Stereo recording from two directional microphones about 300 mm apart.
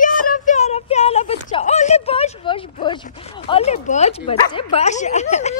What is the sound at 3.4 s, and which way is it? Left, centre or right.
Speech, centre.